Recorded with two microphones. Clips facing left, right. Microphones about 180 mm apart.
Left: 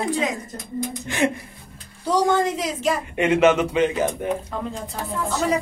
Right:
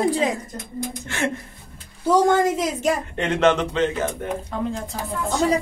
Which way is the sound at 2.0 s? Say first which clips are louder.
Right 3 dB; 45° right (ahead or behind).